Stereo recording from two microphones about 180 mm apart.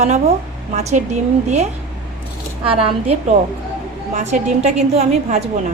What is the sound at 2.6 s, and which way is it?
A woman's voice, 30° right (ahead or behind).